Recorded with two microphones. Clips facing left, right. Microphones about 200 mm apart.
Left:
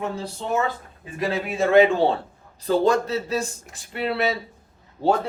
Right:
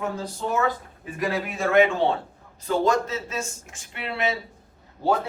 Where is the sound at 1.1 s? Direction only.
25° left (ahead or behind).